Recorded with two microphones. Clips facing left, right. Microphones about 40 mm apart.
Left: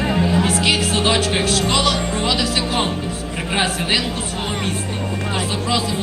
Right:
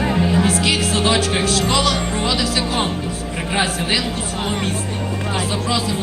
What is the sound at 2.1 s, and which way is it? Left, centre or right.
Music, right.